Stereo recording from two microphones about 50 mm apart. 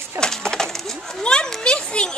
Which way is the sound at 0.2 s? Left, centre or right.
Centre.